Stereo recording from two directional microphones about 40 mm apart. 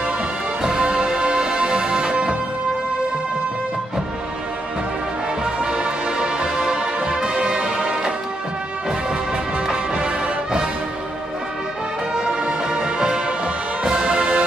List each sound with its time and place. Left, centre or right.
0.7 s music: right
5.4 s music: right
9.7 s music: right
12.4 s music: right